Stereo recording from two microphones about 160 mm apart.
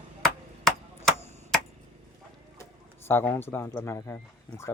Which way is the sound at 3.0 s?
15° left (ahead or behind).